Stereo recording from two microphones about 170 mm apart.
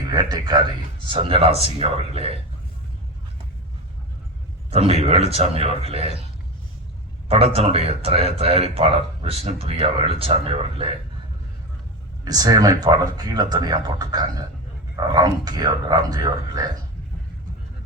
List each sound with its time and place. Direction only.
0.1 s speech: 25° right (ahead or behind)
4.7 s speech: 35° right (ahead or behind)
7.3 s speech: 35° right (ahead or behind)
12.2 s speech: 20° right (ahead or behind)